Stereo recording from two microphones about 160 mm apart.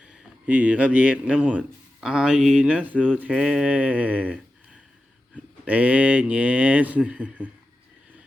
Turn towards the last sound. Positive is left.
turn(degrees=-10)  # may be behind; listen again after turning